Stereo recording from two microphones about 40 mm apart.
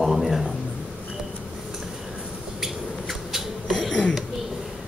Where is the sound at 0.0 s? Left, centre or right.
Centre.